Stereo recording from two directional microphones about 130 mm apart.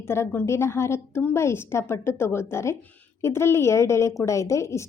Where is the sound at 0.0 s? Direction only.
20° left (ahead or behind).